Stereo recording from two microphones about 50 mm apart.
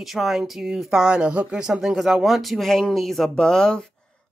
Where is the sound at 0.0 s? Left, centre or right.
Centre; by 1.5 s right.